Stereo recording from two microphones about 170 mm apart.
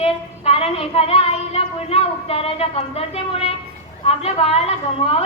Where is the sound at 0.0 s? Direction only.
35° left (ahead or behind).